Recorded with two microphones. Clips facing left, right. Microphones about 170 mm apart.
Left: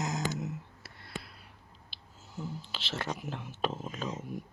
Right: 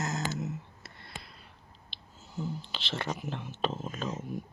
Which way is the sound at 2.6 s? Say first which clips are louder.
Right 1 dB; 5° left (ahead or behind).